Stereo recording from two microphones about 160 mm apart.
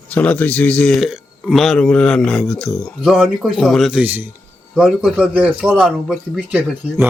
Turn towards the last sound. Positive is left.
turn(degrees=-5)  # may be behind; listen again after turning